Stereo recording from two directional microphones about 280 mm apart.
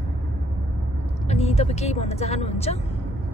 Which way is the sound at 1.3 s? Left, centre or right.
Left.